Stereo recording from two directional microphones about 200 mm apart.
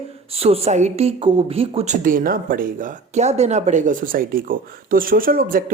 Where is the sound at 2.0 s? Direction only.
45° right (ahead or behind).